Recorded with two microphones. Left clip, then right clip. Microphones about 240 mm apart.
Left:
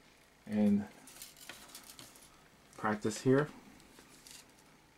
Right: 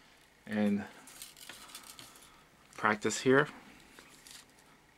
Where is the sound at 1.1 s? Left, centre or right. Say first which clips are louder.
Right 2 dB; centre.